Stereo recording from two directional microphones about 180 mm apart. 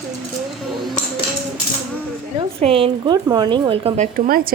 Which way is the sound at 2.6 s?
30° right (ahead or behind).